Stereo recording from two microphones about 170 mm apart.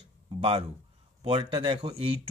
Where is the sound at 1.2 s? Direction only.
30° right (ahead or behind).